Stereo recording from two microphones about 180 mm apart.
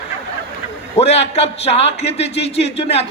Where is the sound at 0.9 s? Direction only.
35° left (ahead or behind).